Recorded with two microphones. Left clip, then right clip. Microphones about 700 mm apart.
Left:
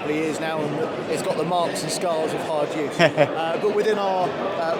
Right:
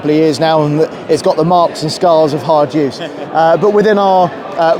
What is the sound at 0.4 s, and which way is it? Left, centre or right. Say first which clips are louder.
Speech: right 16 dB; right.